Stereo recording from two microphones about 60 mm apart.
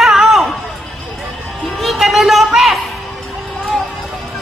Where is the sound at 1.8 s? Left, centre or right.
Centre.